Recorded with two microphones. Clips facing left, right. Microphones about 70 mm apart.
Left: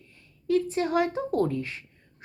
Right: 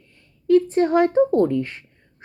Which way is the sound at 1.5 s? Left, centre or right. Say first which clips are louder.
Right 8 dB; right.